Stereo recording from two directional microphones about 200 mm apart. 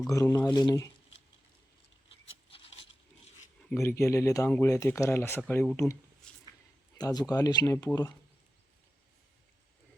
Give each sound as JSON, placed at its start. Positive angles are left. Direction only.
{"t": 0.1, "sound": "speech", "side_deg": 15}
{"t": 2.0, "sound": "a sound", "side_deg": 30}
{"t": 3.7, "sound": "speech", "side_deg": 15}
{"t": 7.0, "sound": "speech", "side_deg": 20}